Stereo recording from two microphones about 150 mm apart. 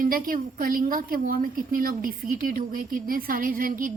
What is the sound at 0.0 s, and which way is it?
A woman's voice, 70° right (ahead or behind).